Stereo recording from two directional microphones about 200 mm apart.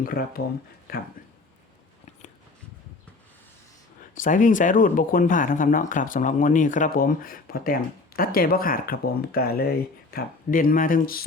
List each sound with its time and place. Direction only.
0.0 s speech: 45° left (ahead or behind)
4.1 s speech: 40° left (ahead or behind)